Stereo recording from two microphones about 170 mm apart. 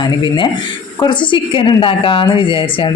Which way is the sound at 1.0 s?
30° left (ahead or behind).